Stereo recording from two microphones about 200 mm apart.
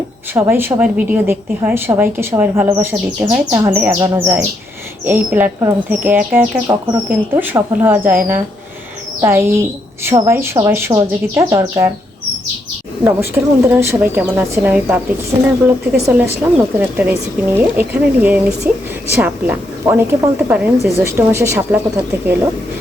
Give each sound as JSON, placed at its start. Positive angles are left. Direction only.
{"t": 0.3, "sound": "a woman's voice", "side_deg": -10}
{"t": 13.1, "sound": "a woman's voice", "side_deg": -10}